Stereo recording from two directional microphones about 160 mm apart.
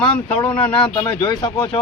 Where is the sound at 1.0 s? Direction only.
25° left (ahead or behind).